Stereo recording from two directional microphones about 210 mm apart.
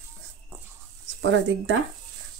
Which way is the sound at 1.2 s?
60° right (ahead or behind).